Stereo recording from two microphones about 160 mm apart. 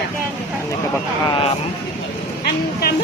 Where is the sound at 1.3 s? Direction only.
35° left (ahead or behind).